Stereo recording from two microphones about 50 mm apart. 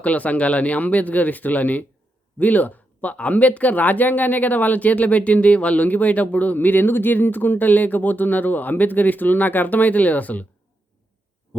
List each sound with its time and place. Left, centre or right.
0.0 s speech: left